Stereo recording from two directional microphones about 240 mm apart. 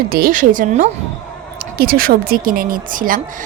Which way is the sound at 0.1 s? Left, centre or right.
Right.